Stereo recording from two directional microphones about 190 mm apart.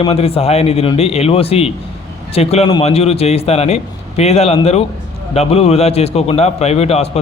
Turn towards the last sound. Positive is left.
turn(degrees=30)  # may be behind; listen again after turning